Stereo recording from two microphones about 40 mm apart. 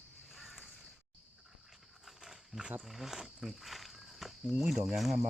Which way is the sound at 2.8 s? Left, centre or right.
Centre.